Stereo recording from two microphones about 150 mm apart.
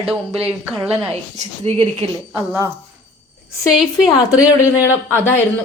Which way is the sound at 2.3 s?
20° right (ahead or behind).